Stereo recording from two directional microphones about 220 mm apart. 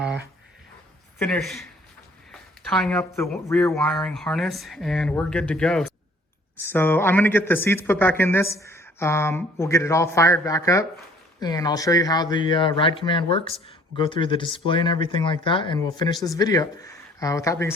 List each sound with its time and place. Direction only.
1.2 s speech: 5° left (ahead or behind)
2.6 s speech: centre (ahead or behind)